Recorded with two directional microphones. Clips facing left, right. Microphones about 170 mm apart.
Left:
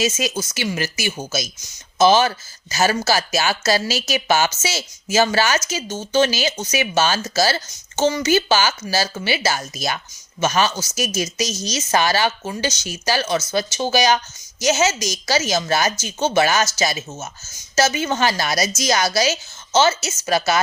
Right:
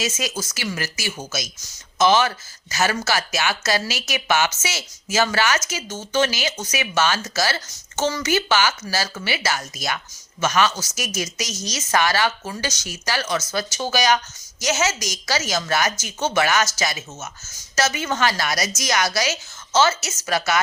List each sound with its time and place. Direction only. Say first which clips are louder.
0.0 s speech: left 5 dB; 25° left (ahead or behind)